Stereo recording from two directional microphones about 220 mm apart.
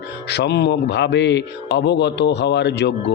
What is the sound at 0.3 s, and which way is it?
Speech, 50° left (ahead or behind).